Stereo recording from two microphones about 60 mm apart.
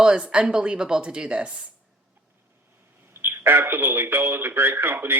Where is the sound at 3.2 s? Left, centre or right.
Right.